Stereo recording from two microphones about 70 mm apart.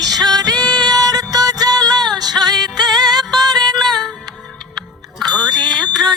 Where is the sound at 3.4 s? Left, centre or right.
Right.